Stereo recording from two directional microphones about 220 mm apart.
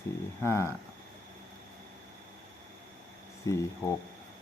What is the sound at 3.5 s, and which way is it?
Speech, 15° left (ahead or behind).